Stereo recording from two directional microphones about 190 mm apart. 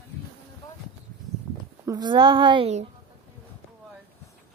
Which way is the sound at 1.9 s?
20° right (ahead or behind).